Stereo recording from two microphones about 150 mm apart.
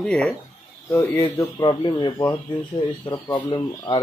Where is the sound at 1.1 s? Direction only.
25° left (ahead or behind).